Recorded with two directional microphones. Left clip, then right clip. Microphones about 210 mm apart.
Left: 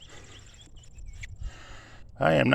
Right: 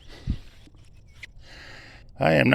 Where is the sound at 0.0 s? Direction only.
20° right (ahead or behind).